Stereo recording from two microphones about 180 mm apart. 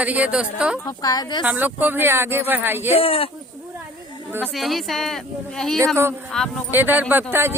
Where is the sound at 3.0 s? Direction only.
30° left (ahead or behind).